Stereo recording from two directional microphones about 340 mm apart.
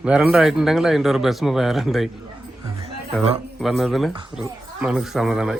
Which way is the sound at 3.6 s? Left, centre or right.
Centre.